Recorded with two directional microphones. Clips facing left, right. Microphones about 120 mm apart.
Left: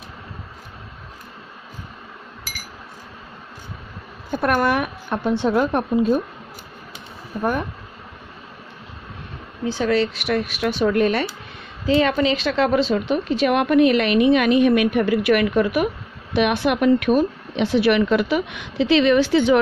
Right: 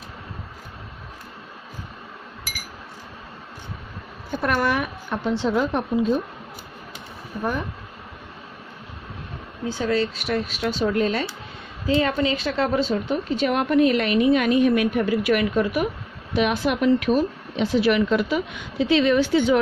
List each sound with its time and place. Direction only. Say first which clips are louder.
4.3 s a woman's voice: left 3 dB; 50° left (ahead or behind)
9.7 s a woman's voice: left 3 dB; 85° left; by 11.2 s 65° left (ahead or behind)
11.8 s a woman's voice: left 3 dB; 85° left; by 17.3 s 55° left (ahead or behind)
17.6 s a woman's voice: left 2 dB; 70° left (ahead or behind)